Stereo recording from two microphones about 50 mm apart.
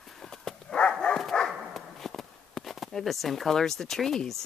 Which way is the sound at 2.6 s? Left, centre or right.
Centre.